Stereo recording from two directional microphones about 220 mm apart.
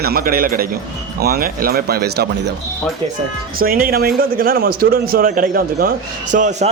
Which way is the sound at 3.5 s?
40° right (ahead or behind).